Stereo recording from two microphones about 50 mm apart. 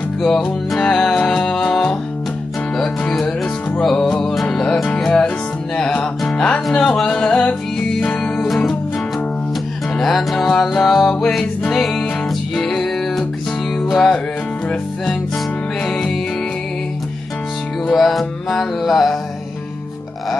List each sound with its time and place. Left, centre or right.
0.7 s music: centre
9.9 s music: centre
17.9 s music: centre